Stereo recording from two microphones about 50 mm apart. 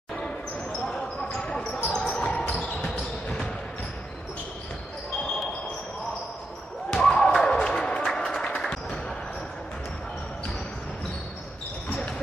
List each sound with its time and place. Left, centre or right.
0.1 s basketball bounce: centre
6.9 s basketball bounce: centre
7.6 s music: centre
11.9 s basketball bounce: centre